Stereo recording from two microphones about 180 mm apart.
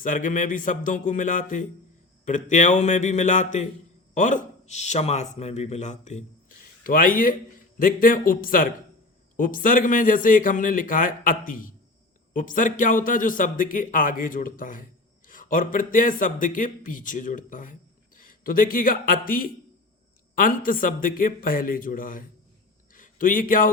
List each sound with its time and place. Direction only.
0.0 s a man's voice: 45° left (ahead or behind)